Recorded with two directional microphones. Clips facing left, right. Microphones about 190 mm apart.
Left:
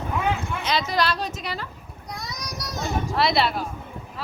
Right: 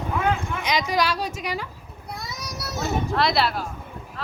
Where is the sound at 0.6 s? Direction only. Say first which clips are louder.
Even; 15° right (ahead or behind).